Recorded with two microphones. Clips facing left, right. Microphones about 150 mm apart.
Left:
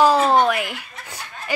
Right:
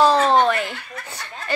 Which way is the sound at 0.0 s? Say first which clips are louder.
Even; 10° left (ahead or behind).